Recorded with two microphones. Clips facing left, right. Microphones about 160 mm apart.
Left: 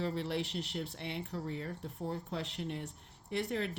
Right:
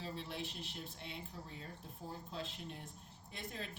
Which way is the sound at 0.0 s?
70° left (ahead or behind).